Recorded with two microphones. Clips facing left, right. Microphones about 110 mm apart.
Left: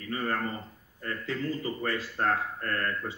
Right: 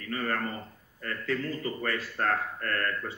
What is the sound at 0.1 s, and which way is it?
A man's voice, 20° left (ahead or behind).